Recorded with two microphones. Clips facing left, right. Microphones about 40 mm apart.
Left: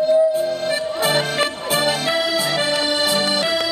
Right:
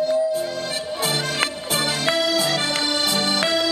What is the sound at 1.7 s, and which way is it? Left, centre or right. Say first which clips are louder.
Music: left 6 dB; centre.